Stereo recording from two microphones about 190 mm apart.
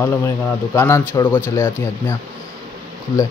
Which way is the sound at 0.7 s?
15° left (ahead or behind).